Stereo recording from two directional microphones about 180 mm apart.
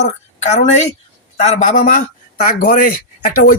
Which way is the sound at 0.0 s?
40° left (ahead or behind).